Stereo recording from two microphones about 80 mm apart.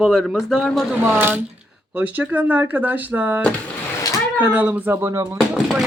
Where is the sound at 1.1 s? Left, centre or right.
Right.